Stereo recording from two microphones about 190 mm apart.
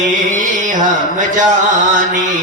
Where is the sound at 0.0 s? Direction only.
40° right (ahead or behind).